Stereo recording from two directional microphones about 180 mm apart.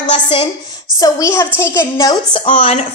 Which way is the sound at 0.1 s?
30° left (ahead or behind).